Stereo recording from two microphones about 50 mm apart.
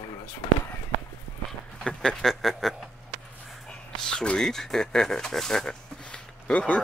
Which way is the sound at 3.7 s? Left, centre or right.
Centre.